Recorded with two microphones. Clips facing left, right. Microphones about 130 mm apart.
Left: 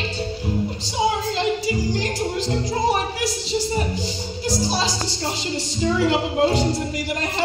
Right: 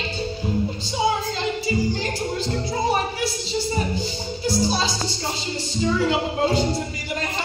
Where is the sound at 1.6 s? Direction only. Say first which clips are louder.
Even; 90° left.